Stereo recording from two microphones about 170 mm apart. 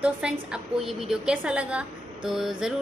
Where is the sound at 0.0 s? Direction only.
5° right (ahead or behind).